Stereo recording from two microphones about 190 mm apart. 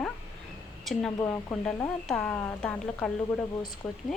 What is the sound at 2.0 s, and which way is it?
Speech, 5° left (ahead or behind).